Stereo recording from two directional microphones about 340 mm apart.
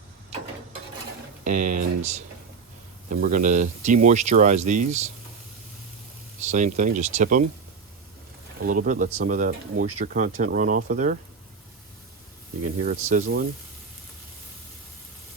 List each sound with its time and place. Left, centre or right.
1.5 s speech: right
6.5 s speech: right
8.5 s speech: right
12.8 s speech: right